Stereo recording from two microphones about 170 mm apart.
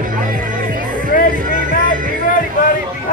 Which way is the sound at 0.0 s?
55° right (ahead or behind).